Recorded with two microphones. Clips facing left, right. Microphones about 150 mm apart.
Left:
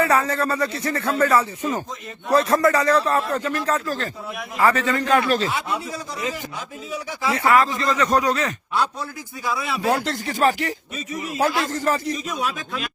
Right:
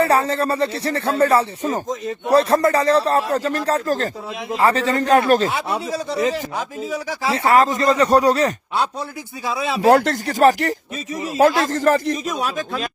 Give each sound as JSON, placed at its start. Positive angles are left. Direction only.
{"t": 0.0, "sound": "speech", "side_deg": -30}
{"t": 4.5, "sound": "speech", "side_deg": -30}
{"t": 5.6, "sound": "speech", "side_deg": -30}
{"t": 9.9, "sound": "speech", "side_deg": -55}
{"t": 11.1, "sound": "speech", "side_deg": -30}
{"t": 11.3, "sound": "speech", "side_deg": -45}